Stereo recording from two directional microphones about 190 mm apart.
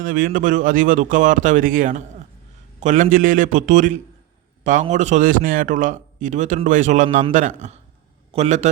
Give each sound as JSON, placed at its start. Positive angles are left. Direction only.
{"t": 0.0, "sound": "a man's voice", "side_deg": -50}